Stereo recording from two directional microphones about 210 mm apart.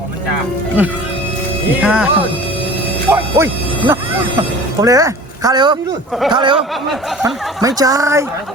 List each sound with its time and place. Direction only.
0.8 s speech: 5° right (ahead or behind)
3.1 s speech: 10° right (ahead or behind)